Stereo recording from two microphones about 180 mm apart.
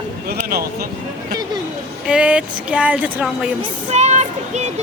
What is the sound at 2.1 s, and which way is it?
Speech, 5° right (ahead or behind).